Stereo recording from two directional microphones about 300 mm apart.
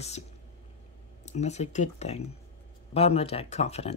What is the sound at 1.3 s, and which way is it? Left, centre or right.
Speech, left.